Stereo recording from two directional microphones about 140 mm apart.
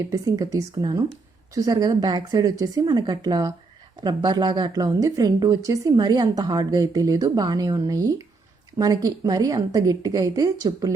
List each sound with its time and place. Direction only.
0.1 s a woman's voice: 25° right (ahead or behind)